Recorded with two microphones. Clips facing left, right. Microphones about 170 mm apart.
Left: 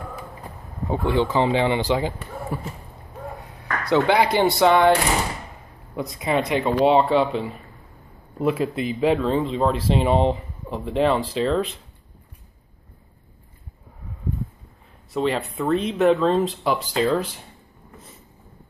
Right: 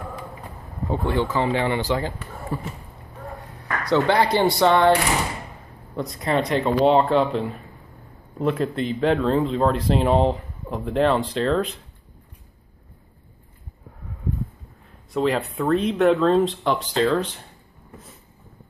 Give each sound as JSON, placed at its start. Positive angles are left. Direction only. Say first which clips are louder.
{"t": 0.8, "sound": "speech", "louder": "left 2 dB", "side_deg": 15}
{"t": 3.9, "sound": "speech", "louder": "left 1 dB", "side_deg": 10}
{"t": 5.9, "sound": "speech", "louder": "even", "side_deg": 5}
{"t": 15.1, "sound": "speech", "louder": "right 1 dB", "side_deg": 0}